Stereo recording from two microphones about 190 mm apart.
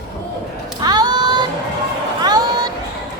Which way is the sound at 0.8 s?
20° right (ahead or behind).